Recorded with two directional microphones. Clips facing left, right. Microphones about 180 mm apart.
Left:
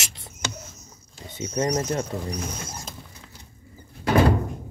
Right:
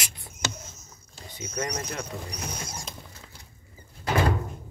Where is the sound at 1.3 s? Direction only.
30° left (ahead or behind).